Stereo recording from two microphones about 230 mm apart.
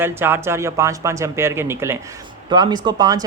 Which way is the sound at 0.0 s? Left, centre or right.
Centre.